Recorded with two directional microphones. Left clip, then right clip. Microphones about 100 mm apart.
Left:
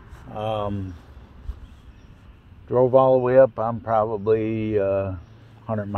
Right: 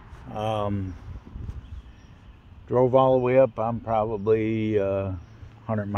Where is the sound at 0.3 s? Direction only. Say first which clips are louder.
Left 1 dB; 50° right (ahead or behind).